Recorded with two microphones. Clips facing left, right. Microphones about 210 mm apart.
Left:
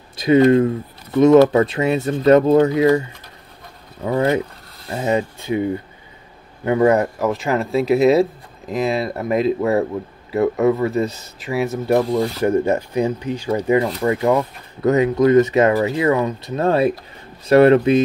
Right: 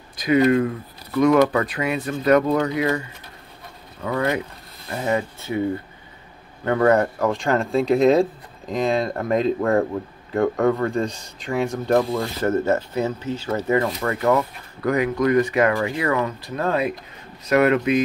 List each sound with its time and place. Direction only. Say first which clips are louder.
0.1 s speech: left 5 dB; 25° left (ahead or behind)
4.0 s speech: left 5 dB; 25° left (ahead or behind)
6.6 s speech: left 2 dB; 10° left (ahead or behind)
12.1 s speech: left 4 dB; 15° left (ahead or behind)